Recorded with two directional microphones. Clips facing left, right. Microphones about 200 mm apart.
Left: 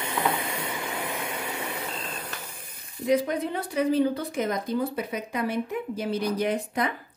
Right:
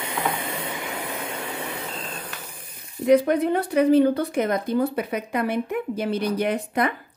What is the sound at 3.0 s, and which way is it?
Speech, 60° right (ahead or behind).